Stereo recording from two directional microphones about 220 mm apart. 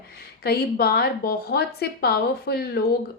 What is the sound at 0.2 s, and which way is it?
A woman's voice, 45° left (ahead or behind).